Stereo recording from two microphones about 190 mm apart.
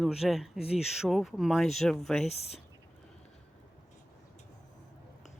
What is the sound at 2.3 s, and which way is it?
Speech, 35° left (ahead or behind).